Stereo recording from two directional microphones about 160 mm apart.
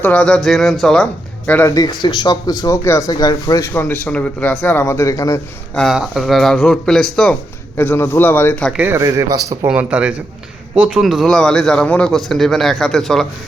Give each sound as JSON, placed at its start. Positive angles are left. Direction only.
{"t": 0.0, "sound": "a man's voice", "side_deg": 5}
{"t": 1.7, "sound": "speech", "side_deg": 25}
{"t": 5.7, "sound": "a man's voice", "side_deg": 0}
{"t": 8.7, "sound": "speech", "side_deg": -15}
{"t": 9.6, "sound": "a man's voice", "side_deg": -10}